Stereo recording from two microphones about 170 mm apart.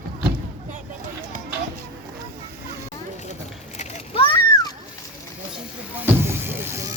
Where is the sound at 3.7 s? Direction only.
30° left (ahead or behind).